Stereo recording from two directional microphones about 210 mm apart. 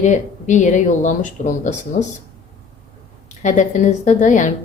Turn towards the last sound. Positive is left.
turn(degrees=35)  # may be behind; listen again after turning